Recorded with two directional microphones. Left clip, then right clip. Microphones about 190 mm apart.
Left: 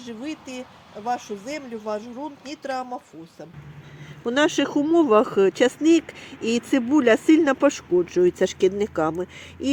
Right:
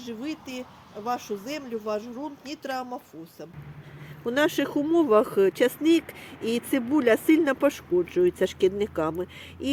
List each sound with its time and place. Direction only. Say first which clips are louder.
0.0 s speech: left 1 dB; 45° left (ahead or behind)
4.2 s speech: left 3 dB; 25° left (ahead or behind)